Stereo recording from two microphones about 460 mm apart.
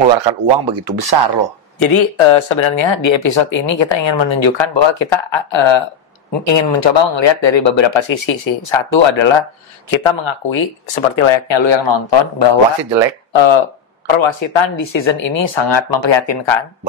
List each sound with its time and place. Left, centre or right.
0.1 s speech: right
1.8 s speech: left